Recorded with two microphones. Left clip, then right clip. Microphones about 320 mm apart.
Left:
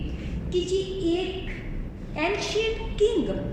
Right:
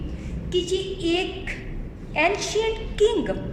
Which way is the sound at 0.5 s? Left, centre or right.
Right.